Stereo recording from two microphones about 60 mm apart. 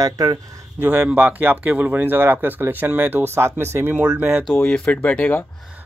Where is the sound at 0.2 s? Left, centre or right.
Right.